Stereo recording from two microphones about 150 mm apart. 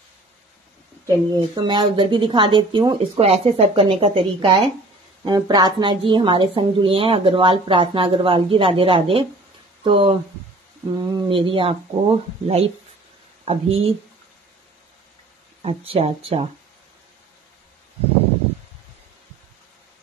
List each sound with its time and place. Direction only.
1.0 s speech: 25° right (ahead or behind)
3.3 s speech: 45° right (ahead or behind)
11.2 s speech: 35° right (ahead or behind)
15.6 s speech: 40° right (ahead or behind)